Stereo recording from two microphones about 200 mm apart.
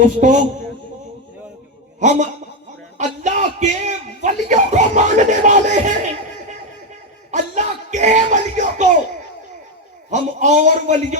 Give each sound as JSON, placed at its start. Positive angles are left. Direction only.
{"t": 0.2, "sound": "speech", "side_deg": -40}
{"t": 2.0, "sound": "speech", "side_deg": -35}
{"t": 7.3, "sound": "speech", "side_deg": -40}
{"t": 10.1, "sound": "speech", "side_deg": -35}